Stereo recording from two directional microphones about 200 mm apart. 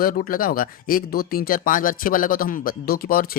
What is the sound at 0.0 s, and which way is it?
Speech, 45° left (ahead or behind).